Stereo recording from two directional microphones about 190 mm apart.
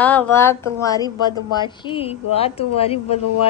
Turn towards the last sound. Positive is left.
turn(degrees=30)  # may be behind; listen again after turning